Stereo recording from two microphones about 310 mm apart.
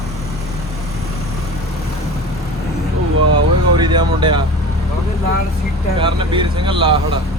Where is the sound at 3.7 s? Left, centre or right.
Centre.